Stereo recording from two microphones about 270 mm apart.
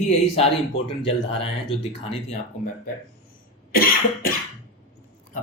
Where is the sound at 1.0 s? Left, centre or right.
Left.